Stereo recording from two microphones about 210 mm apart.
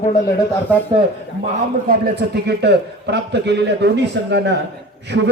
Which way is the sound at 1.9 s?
50° right (ahead or behind).